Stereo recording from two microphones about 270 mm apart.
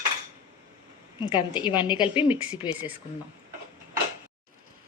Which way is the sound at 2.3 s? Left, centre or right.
Centre.